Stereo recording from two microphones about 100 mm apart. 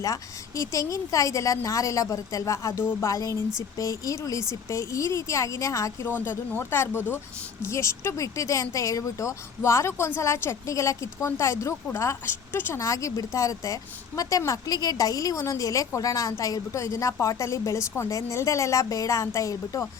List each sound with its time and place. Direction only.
0.0 s a woman's voice: 35° left (ahead or behind)